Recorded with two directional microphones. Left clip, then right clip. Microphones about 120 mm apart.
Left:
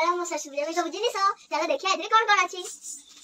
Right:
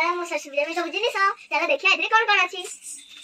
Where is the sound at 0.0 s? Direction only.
15° left (ahead or behind).